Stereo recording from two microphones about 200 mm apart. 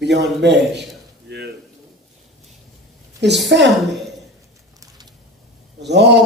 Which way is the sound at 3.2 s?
60° right (ahead or behind).